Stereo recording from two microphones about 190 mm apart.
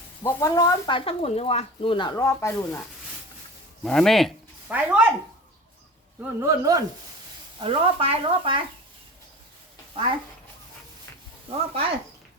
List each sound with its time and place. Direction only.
0.2 s speech: 15° left (ahead or behind)
3.8 s speech: centre (ahead or behind)
6.4 s speech: 20° right (ahead or behind)
11.4 s speech: 30° right (ahead or behind)